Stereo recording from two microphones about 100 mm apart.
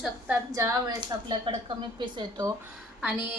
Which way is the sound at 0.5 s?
35° right (ahead or behind).